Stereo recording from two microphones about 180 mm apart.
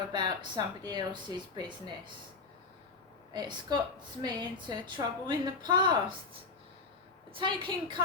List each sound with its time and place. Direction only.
0.1 s a woman's voice: 25° right (ahead or behind)
3.3 s a woman's voice: 25° right (ahead or behind)
7.3 s a woman's voice: 30° right (ahead or behind)